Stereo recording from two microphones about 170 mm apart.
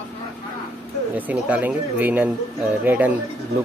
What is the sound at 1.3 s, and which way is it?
Speech, 10° right (ahead or behind).